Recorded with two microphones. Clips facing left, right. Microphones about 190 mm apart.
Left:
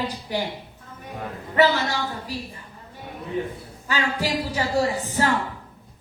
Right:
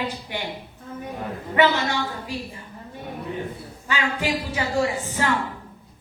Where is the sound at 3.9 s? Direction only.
35° left (ahead or behind).